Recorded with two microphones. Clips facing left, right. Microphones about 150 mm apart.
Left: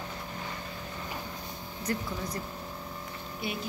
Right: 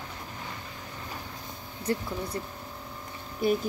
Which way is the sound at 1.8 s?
30° right (ahead or behind).